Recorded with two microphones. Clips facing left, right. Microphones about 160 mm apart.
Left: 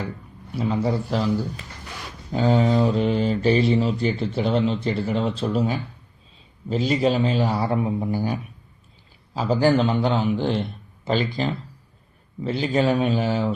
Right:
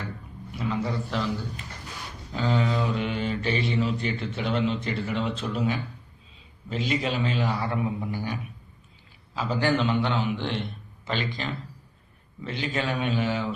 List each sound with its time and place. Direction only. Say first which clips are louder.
0.5 s speech: left 6 dB; 35° left (ahead or behind)
2.3 s speech: left 7 dB; 40° left (ahead or behind)